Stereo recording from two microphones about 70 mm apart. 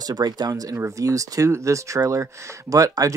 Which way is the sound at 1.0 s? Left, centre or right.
Right.